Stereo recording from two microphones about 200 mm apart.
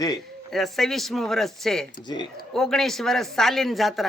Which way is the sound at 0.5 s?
Centre (ahead or behind).